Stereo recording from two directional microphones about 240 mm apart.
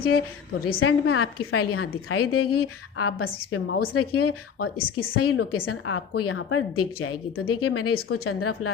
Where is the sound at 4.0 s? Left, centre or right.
Left.